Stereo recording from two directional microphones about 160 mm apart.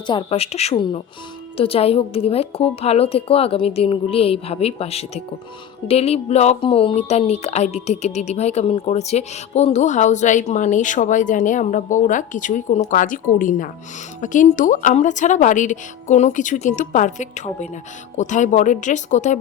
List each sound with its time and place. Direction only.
0.1 s a woman's voice: 35° left (ahead or behind); by 19.4 s 50° left (ahead or behind)